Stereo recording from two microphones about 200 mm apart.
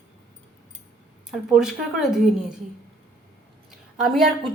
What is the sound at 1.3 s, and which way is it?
A woman's voice, centre (ahead or behind).